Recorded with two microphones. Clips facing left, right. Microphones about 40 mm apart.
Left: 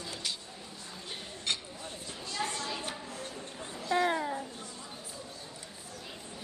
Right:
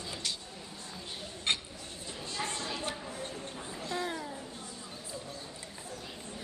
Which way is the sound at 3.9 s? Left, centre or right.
Left.